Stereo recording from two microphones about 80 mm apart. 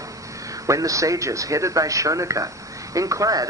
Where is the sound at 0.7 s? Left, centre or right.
Right.